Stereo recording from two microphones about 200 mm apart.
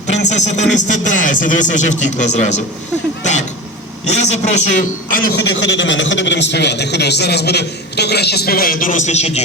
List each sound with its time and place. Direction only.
0.3 s speech: 35° left (ahead or behind)
4.0 s speech: 35° left (ahead or behind)
5.4 s a man's voice: 60° left (ahead or behind); by 9.4 s 35° left (ahead or behind)